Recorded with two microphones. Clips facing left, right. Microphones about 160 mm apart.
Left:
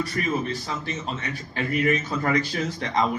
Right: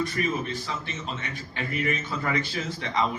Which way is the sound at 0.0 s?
35° left (ahead or behind).